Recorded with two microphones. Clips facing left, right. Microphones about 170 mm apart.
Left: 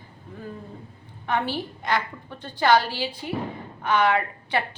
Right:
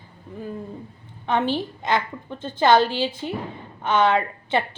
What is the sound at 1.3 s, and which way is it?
A woman's voice, 20° right (ahead or behind).